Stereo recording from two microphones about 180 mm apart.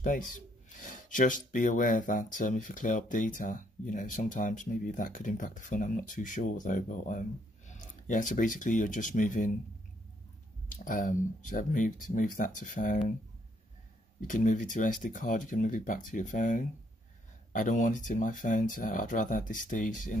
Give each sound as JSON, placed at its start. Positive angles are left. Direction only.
{"t": 0.7, "sound": "speech", "side_deg": 45}
{"t": 10.7, "sound": "speech", "side_deg": 50}
{"t": 14.2, "sound": "speech", "side_deg": 45}